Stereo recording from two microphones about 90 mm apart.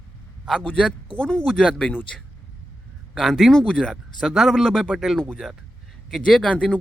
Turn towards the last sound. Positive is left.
turn(degrees=10)  # may be behind; listen again after turning